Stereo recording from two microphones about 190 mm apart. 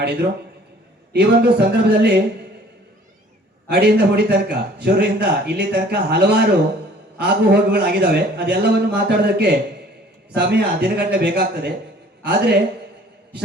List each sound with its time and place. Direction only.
0.0 s a man's voice: 60° right (ahead or behind)
3.7 s a man's voice: 55° right (ahead or behind)